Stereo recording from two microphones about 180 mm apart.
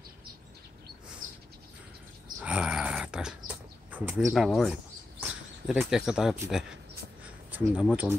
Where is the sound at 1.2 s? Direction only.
50° right (ahead or behind).